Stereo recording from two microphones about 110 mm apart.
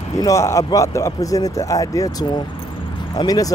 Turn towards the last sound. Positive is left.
turn(degrees=35)  # may be behind; listen again after turning